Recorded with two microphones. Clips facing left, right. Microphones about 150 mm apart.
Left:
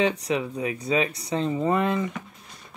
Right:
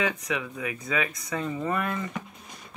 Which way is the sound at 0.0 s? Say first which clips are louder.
Left 5 dB; 30° left (ahead or behind).